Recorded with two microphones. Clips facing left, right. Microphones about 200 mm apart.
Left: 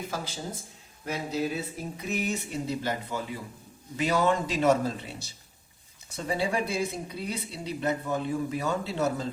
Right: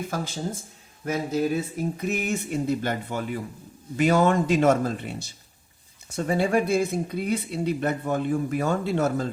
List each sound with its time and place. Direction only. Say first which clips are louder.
1.0 s speech: right 5 dB; 50° right (ahead or behind)